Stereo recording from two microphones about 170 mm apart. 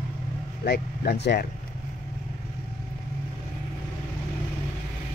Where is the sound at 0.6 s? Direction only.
75° left (ahead or behind).